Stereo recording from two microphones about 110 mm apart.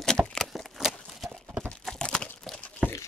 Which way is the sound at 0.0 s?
5° left (ahead or behind).